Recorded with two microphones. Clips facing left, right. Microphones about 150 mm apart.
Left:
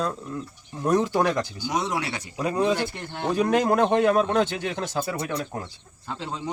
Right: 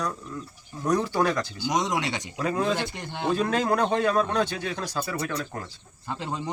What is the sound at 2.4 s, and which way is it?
Speech, 15° left (ahead or behind).